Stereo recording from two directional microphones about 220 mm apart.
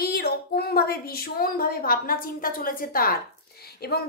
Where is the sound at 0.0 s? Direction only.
45° left (ahead or behind).